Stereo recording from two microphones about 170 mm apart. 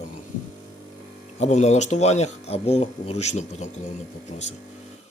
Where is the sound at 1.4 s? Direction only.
40° left (ahead or behind).